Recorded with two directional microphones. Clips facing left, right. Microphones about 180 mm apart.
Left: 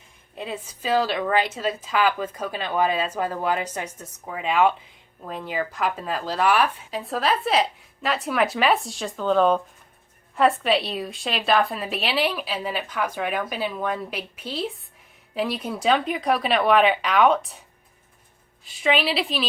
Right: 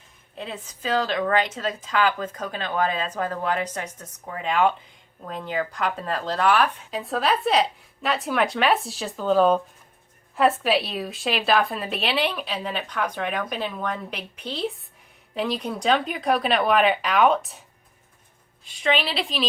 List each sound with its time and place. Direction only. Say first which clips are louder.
0.3 s a woman's voice: left 2 dB; 10° left (ahead or behind)
18.6 s a woman's voice: left 2 dB; 5° left (ahead or behind)